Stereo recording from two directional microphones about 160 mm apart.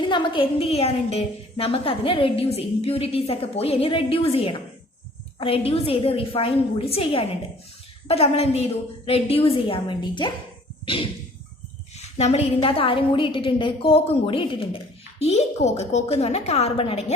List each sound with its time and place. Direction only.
0.1 s a woman's voice: 30° left (ahead or behind)